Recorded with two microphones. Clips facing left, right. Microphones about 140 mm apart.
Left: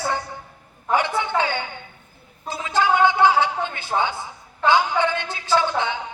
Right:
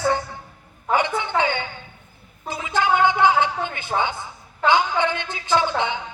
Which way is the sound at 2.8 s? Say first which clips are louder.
Left 1 dB; 15° right (ahead or behind).